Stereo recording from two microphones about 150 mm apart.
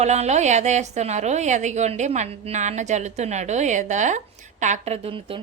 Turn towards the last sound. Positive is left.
turn(degrees=-40)  # may be behind; listen again after turning